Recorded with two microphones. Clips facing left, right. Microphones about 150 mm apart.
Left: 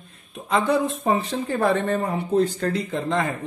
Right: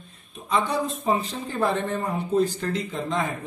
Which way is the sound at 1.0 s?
65° left (ahead or behind).